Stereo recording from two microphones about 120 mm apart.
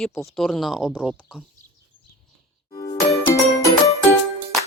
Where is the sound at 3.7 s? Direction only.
25° left (ahead or behind).